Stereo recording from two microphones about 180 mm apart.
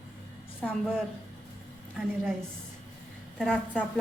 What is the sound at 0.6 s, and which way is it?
Speech, centre (ahead or behind).